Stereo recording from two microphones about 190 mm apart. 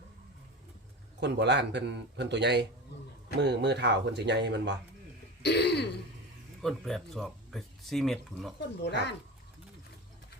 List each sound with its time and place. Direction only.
1.2 s a man's voice: 65° right (ahead or behind)
5.4 s throat clearing: 60° left (ahead or behind)
6.6 s speech: centre (ahead or behind)
8.8 s speech: 65° left (ahead or behind)